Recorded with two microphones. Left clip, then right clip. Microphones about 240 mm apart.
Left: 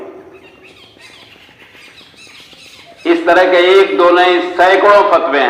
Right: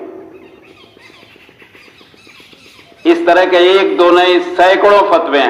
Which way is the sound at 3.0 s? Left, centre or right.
Right.